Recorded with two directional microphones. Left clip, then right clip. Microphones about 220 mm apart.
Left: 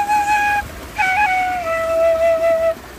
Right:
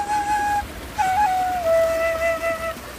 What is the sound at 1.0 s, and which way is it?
Wheeze, centre (ahead or behind).